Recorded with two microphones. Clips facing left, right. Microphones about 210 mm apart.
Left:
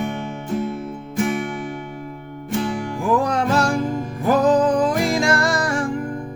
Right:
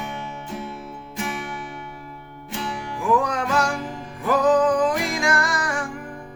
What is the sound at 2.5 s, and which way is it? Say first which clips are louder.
Music: left 7 dB; 45° left (ahead or behind).